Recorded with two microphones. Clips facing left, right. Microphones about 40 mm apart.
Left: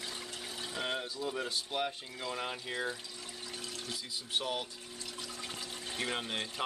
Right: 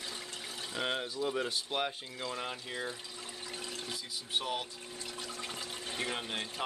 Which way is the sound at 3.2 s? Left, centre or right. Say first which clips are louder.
Right 2 dB; right.